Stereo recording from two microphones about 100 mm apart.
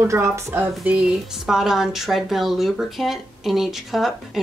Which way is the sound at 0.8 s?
10° right (ahead or behind).